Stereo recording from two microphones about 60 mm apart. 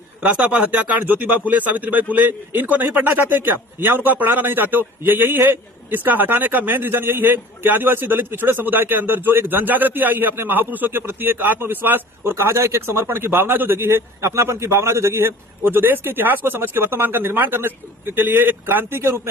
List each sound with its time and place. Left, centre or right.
0.2 s speech: centre
0.7 s a man's voice: right
15.6 s speech: right